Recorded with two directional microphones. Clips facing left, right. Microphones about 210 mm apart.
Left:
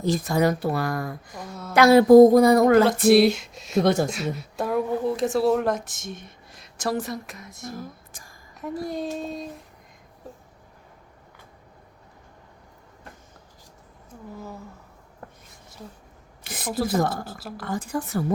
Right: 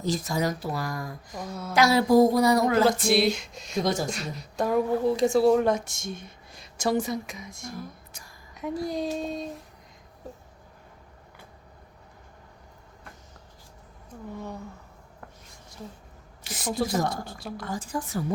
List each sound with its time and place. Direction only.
0.0 s speech: 55° left (ahead or behind)
1.5 s speech: centre (ahead or behind)
1.7 s speech: 55° left (ahead or behind)
2.8 s speech: centre (ahead or behind)
3.8 s speech: 60° left (ahead or behind)
4.1 s speech: 5° left (ahead or behind)
8.1 s a sound: 50° left (ahead or behind)
8.5 s speech: centre (ahead or behind)
14.3 s speech: 5° left (ahead or behind)
16.4 s speech: 55° left (ahead or behind)
16.7 s speech: 5° left (ahead or behind)
17.7 s speech: 60° left (ahead or behind)